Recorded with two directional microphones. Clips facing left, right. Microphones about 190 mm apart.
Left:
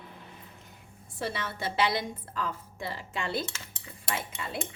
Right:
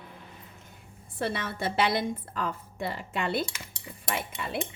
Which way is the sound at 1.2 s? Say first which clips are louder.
Right 3 dB; 55° right (ahead or behind).